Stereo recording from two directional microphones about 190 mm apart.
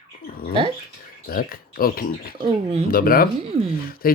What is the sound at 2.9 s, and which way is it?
Speech, 50° left (ahead or behind).